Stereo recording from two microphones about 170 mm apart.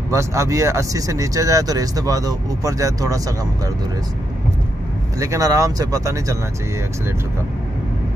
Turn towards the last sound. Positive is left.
turn(degrees=-20)  # may be behind; listen again after turning